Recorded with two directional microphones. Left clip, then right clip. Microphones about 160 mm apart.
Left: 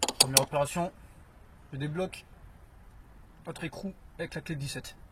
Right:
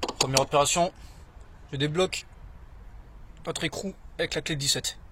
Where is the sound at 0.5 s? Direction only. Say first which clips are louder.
Right 7 dB; 30° right (ahead or behind).